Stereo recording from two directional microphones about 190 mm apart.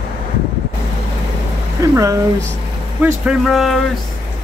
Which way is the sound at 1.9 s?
15° right (ahead or behind).